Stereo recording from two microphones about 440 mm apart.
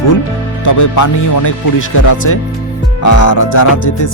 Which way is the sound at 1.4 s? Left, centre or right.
Left.